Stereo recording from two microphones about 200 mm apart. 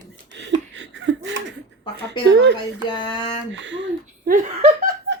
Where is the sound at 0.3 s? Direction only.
60° right (ahead or behind).